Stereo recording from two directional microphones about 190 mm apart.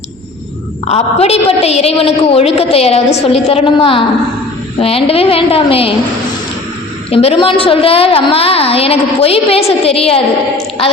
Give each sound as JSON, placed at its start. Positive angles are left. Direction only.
{"t": 0.9, "sound": "a woman's voice", "side_deg": 35}
{"t": 7.1, "sound": "a woman's voice", "side_deg": 30}